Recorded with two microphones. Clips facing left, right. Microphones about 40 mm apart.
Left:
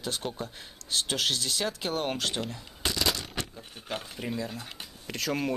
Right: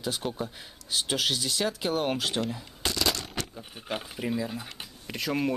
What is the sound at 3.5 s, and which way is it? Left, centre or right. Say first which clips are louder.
Speech: right 2 dB; centre.